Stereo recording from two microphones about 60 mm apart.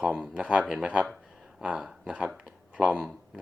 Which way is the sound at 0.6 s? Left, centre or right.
Centre.